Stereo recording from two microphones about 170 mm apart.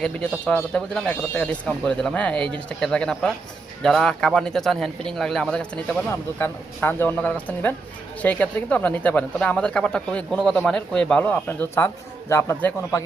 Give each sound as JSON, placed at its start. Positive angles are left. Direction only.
{"t": 0.0, "sound": "a man's voice", "side_deg": 5}